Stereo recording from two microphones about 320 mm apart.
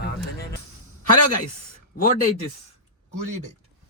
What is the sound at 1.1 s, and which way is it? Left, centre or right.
Speech, left.